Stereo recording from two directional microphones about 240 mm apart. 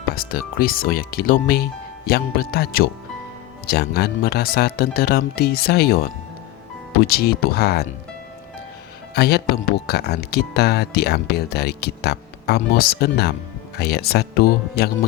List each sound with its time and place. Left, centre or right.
0.1 s speech: left
9.1 s speech: left